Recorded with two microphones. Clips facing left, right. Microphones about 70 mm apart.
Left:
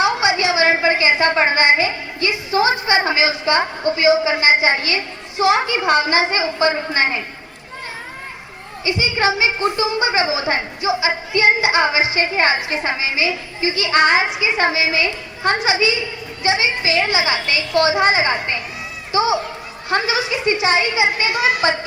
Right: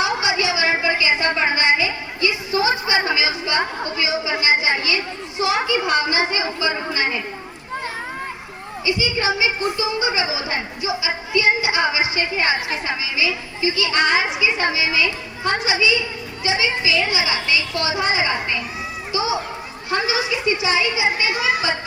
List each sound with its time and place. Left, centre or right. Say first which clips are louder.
0.0 s a sound: left 4 dB; left
3.9 s a woman's voice: left 9 dB; left
8.8 s a woman's voice: left 3 dB; left